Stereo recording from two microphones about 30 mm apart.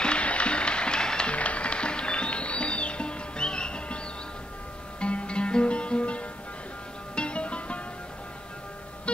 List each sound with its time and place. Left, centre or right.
0.0 s music: left
1.3 s music: left
5.0 s music: left